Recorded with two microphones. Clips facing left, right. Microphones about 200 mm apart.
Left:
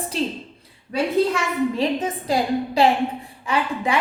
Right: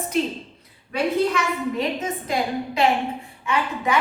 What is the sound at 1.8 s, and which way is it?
A woman's voice, 35° left (ahead or behind).